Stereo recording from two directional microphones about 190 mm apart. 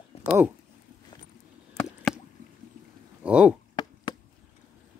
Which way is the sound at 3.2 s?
5° right (ahead or behind).